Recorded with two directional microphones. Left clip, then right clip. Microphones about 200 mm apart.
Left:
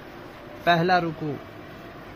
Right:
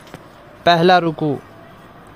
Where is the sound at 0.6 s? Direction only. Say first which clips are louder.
Right 8 dB; 50° right (ahead or behind).